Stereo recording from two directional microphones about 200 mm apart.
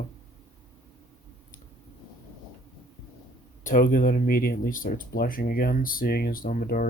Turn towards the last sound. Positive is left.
turn(degrees=45)  # may be behind; listen again after turning